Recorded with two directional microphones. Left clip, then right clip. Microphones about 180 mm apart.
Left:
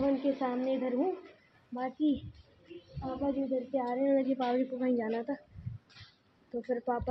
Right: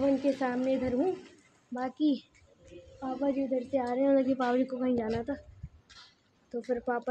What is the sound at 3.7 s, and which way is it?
Speech, 25° right (ahead or behind).